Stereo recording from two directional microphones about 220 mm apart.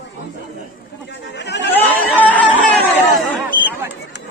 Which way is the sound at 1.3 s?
50° left (ahead or behind).